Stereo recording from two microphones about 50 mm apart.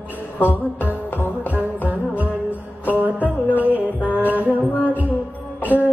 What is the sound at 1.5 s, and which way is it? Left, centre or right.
Music, right.